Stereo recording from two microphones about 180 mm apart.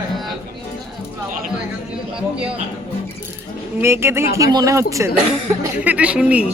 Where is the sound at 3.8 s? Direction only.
15° right (ahead or behind).